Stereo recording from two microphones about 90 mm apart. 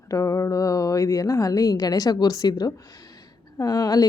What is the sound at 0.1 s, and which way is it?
A woman's voice, 35° left (ahead or behind).